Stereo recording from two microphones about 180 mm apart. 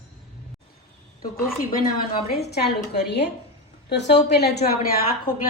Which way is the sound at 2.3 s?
65° left (ahead or behind).